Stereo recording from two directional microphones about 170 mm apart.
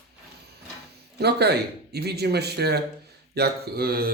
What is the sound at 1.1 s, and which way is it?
Speech, 75° right (ahead or behind).